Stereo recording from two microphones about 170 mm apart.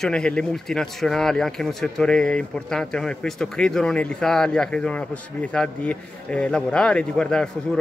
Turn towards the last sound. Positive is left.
turn(degrees=5)  # may be behind; listen again after turning